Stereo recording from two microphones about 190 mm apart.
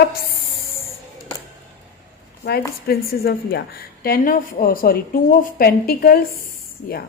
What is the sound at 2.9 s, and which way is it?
A woman's voice, 55° left (ahead or behind).